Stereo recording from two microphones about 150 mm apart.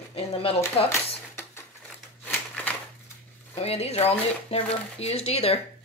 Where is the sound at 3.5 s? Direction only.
45° left (ahead or behind).